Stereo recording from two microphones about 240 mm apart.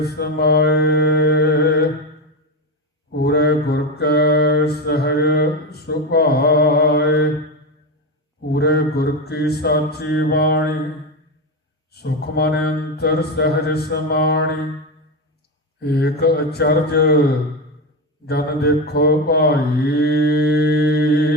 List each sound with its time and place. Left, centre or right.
0.0 s mantra: left
3.1 s mantra: left
8.4 s mantra: left
11.9 s speech: left
15.8 s speech: left
18.3 s mantra: left